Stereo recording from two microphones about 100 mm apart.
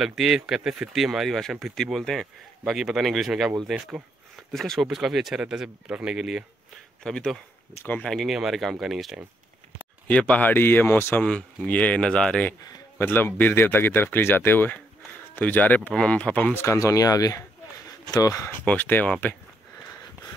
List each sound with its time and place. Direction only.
0.0 s speech: centre (ahead or behind)
7.0 s speech: 5° left (ahead or behind)
10.0 s speech: 10° left (ahead or behind)
11.2 s speech: 10° left (ahead or behind)
13.0 s speech: 20° left (ahead or behind)
16.6 s speech: 35° left (ahead or behind)
18.7 s speech: 20° left (ahead or behind)